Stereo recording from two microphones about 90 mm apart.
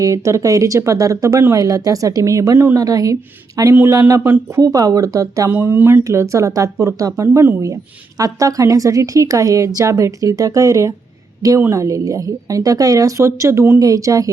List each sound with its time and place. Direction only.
0.0 s a woman's voice: 35° right (ahead or behind)
1.6 s a woman's voice: 45° right (ahead or behind)
4.2 s speech: 20° right (ahead or behind)
4.6 s a woman's voice: 40° right (ahead or behind)
5.5 s a woman's voice: 25° right (ahead or behind); by 14.3 s 40° right (ahead or behind)